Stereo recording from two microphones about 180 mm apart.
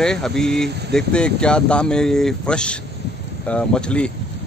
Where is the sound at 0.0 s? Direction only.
5° left (ahead or behind).